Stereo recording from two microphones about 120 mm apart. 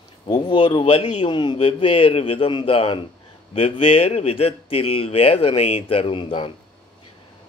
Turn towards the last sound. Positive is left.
turn(degrees=45)  # may be behind; listen again after turning